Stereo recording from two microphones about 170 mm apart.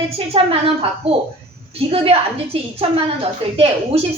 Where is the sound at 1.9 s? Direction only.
35° right (ahead or behind).